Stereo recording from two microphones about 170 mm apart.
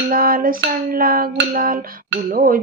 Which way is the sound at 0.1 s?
55° right (ahead or behind).